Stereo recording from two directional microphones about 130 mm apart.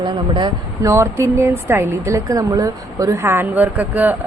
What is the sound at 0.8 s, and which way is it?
Speech, 20° right (ahead or behind).